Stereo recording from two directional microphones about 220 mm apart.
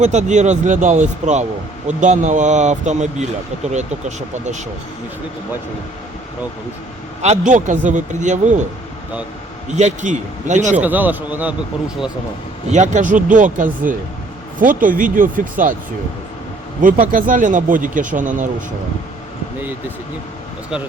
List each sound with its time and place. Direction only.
0.0 s speech: 30° right (ahead or behind)
7.2 s speech: 30° right (ahead or behind)
9.7 s speech: 30° right (ahead or behind)
10.8 s speech: 5° right (ahead or behind)
12.7 s speech: 35° right (ahead or behind)
16.8 s speech: 40° right (ahead or behind)